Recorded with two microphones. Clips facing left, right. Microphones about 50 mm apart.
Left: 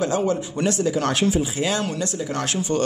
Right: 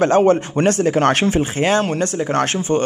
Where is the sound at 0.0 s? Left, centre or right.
Right.